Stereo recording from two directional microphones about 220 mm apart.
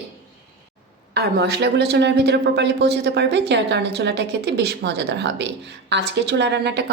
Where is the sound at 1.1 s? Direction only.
45° right (ahead or behind).